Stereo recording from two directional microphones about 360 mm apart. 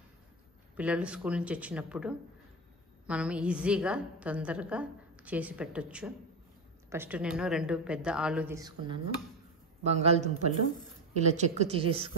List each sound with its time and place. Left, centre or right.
0.7 s a woman's voice: centre
11.3 s a woman's voice: centre